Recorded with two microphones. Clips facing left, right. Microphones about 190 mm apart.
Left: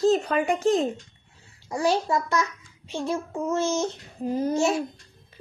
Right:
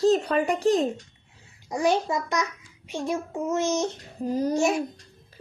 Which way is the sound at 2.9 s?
15° right (ahead or behind).